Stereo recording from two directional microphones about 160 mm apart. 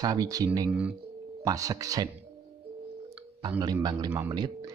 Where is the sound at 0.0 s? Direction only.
25° right (ahead or behind).